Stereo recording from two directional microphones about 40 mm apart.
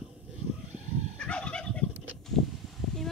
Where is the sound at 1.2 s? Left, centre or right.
Left.